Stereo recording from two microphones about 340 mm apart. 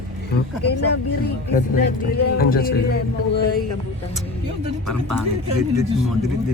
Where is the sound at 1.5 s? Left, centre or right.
Left.